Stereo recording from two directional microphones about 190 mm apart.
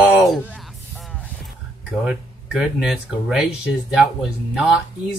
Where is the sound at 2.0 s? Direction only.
5° right (ahead or behind).